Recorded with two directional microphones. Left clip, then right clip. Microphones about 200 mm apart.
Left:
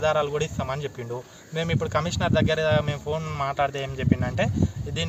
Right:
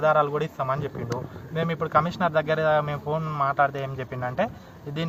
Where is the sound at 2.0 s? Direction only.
55° left (ahead or behind).